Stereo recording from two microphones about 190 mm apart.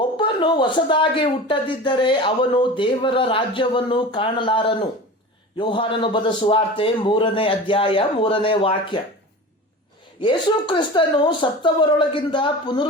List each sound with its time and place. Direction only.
0.2 s speech: 25° left (ahead or behind)
10.2 s speech: 25° left (ahead or behind)